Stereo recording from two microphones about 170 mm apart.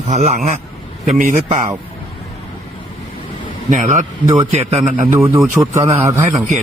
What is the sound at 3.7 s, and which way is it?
A man's voice, 45° right (ahead or behind).